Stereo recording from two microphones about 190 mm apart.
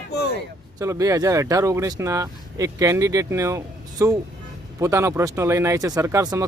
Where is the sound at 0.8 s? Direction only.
15° right (ahead or behind).